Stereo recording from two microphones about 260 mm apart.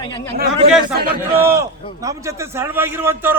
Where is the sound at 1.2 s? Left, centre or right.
Centre.